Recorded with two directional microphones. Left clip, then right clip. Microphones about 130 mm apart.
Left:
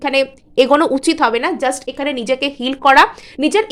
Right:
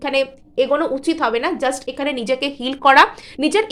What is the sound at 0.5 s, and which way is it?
Speech, 90° left.